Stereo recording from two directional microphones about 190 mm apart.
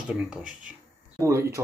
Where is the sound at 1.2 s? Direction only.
15° right (ahead or behind).